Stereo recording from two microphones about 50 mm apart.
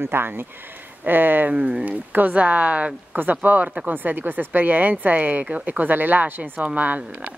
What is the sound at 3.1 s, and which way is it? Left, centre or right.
Speech, right.